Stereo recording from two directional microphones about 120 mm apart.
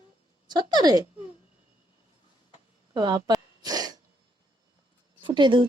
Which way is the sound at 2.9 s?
35° right (ahead or behind).